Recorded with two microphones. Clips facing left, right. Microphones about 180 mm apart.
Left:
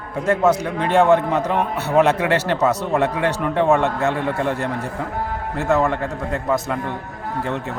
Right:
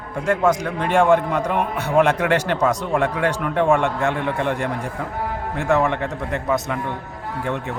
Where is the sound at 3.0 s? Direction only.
10° right (ahead or behind).